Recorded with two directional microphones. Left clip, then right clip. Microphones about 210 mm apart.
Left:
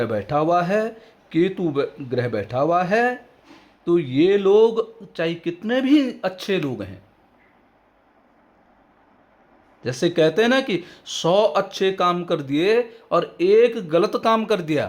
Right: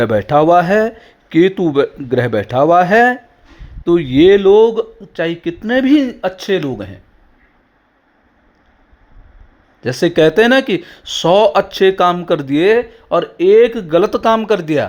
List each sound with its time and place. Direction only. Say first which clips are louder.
0.0 s speech: right 10 dB; 30° right (ahead or behind)
9.8 s speech: right 7 dB; 20° right (ahead or behind)